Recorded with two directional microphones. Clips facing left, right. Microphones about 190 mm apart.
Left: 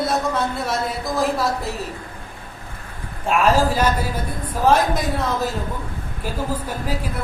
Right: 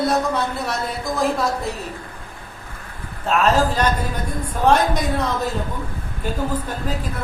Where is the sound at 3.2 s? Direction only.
10° left (ahead or behind).